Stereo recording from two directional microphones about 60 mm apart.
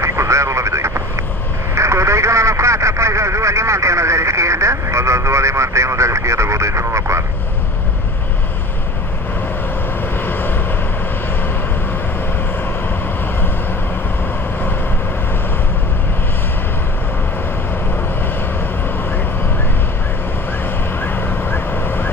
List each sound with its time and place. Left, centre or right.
0.0 s vehicle: right
1.8 s a sound: right
10.2 s vehicle: left
21.0 s vehicle: left